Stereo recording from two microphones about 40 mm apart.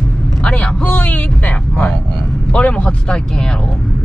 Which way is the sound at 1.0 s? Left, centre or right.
Left.